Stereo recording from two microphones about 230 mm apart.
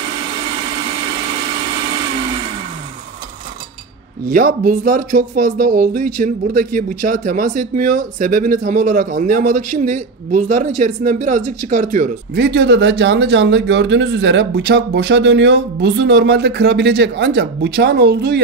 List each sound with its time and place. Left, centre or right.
4.3 s speech: right
12.4 s speech: right